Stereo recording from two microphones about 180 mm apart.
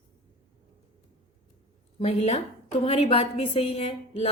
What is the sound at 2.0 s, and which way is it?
A woman's voice, 35° left (ahead or behind).